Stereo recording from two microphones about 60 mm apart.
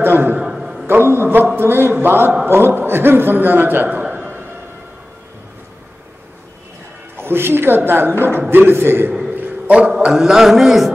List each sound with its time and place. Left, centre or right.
0.0 s a man's voice: right
0.4 s a sound: centre
0.8 s a woman's voice: right
7.2 s a woman's voice: right
9.3 s a man's voice: centre